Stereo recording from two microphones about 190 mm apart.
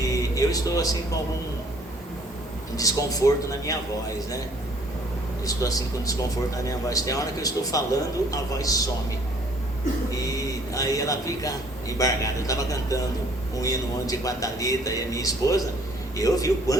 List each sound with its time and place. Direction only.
0.1 s music: 15° left (ahead or behind)
2.7 s a man's voice: 20° left (ahead or behind)
5.5 s a man's voice: 20° left (ahead or behind)
10.1 s a man's voice: 20° left (ahead or behind)